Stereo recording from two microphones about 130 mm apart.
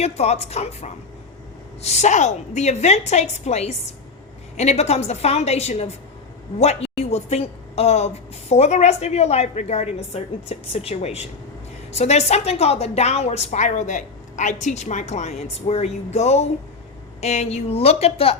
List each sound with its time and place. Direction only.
0.0 s a woman's voice: 55° left (ahead or behind)